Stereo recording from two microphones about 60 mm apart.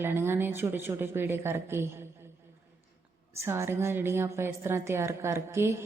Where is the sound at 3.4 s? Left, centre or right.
Right.